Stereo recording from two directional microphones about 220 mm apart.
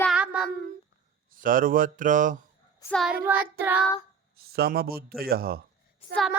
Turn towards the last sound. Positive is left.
turn(degrees=0)  # may be behind; listen again after turning